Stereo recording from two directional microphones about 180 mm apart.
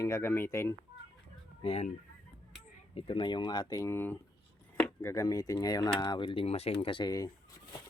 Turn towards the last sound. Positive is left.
turn(degrees=20)  # may be behind; listen again after turning